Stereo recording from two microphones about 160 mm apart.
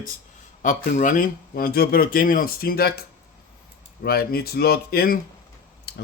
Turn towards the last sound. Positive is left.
turn(degrees=70)  # may be behind; listen again after turning